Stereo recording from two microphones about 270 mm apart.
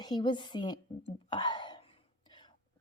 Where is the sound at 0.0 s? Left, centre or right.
Centre.